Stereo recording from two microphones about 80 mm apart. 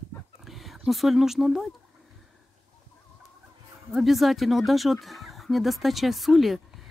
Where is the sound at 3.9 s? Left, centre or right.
Centre.